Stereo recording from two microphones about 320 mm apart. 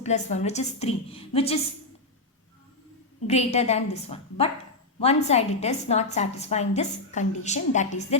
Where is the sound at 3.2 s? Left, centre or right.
Centre.